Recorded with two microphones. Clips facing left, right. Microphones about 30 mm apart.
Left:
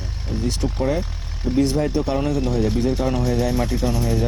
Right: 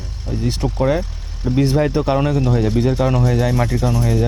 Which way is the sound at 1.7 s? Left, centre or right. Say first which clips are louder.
Right 4 dB; right.